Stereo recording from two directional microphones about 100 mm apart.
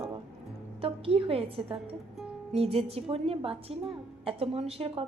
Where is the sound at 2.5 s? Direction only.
85° right.